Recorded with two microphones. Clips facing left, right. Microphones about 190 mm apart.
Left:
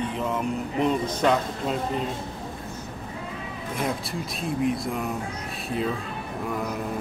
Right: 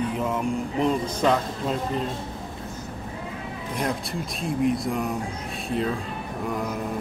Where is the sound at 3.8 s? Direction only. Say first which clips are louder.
Right 1 dB; centre (ahead or behind).